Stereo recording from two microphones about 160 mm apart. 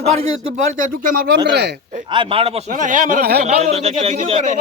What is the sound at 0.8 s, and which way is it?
Speech, 55° right (ahead or behind).